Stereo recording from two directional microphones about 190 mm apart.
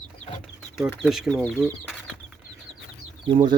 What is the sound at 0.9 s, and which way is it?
Speech, centre (ahead or behind).